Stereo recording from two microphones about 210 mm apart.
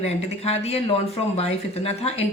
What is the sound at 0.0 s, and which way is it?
Speech, 30° left (ahead or behind).